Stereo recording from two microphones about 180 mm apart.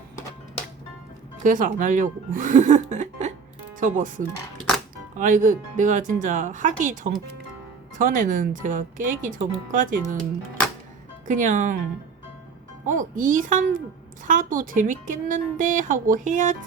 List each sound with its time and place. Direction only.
1.5 s a woman's voice: 45° right (ahead or behind)
5.1 s a woman's voice: 45° right (ahead or behind)
11.3 s a woman's voice: 45° right (ahead or behind)
12.8 s a woman's voice: 45° right (ahead or behind)